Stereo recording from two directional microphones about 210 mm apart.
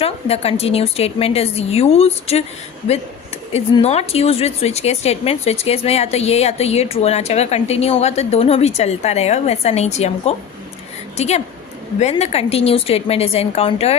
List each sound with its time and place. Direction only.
0.0 s a woman's voice: 30° left (ahead or behind)
3.5 s a woman's voice: 30° left (ahead or behind)